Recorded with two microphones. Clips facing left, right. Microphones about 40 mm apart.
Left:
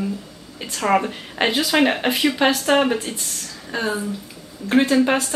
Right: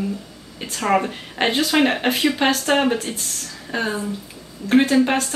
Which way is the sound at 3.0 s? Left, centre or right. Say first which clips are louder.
Right 1 dB; centre.